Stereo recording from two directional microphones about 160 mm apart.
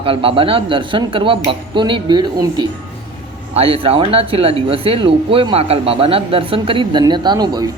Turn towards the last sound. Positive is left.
turn(degrees=-25)  # may be behind; listen again after turning